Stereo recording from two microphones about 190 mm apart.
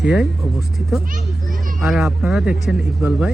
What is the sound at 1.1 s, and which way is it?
Children playing, 45° right (ahead or behind).